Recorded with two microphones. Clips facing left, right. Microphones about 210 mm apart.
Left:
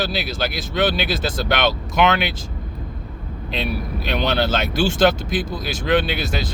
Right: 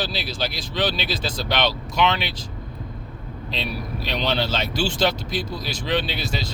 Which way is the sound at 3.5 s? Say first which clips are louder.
Left 4 dB; 55° left (ahead or behind).